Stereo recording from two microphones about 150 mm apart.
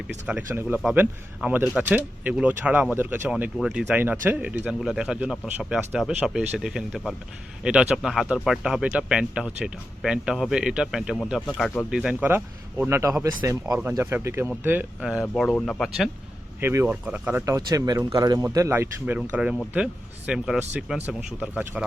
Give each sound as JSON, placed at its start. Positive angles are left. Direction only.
{"t": 0.4, "sound": "speech", "side_deg": -15}
{"t": 11.9, "sound": "speech", "side_deg": -10}
{"t": 16.6, "sound": "speech", "side_deg": -15}
{"t": 17.4, "sound": "speech", "side_deg": -20}